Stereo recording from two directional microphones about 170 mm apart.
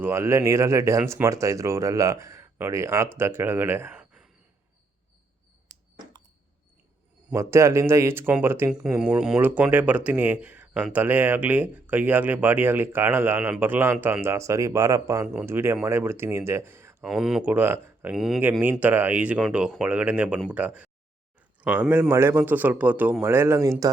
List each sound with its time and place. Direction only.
0.0 s speech: 15° right (ahead or behind)
7.3 s speech: 15° right (ahead or behind)
17.1 s speech: centre (ahead or behind)
18.1 s speech: centre (ahead or behind)